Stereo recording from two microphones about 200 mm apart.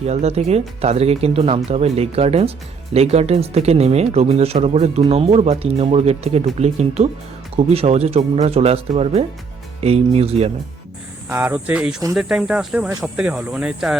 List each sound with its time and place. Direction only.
0.0 s speech: 30° right (ahead or behind)
11.3 s speech: 10° right (ahead or behind)